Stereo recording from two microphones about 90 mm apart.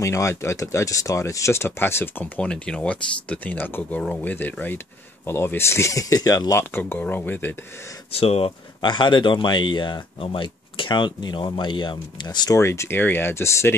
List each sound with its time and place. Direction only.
0.0 s speech: 30° left (ahead or behind)
6.7 s speech: 25° left (ahead or behind)
8.1 s speech: 90° left
8.9 s speech: 60° left (ahead or behind)
12.5 s speech: 30° left (ahead or behind)